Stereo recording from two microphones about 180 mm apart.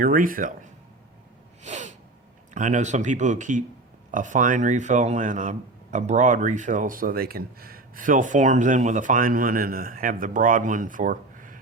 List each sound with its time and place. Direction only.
0.0 s speech: 50° right (ahead or behind)
1.6 s gasp: 40° right (ahead or behind)
2.5 s speech: 45° right (ahead or behind)